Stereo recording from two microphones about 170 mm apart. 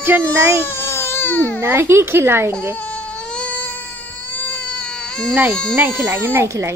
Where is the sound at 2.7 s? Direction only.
10° left (ahead or behind).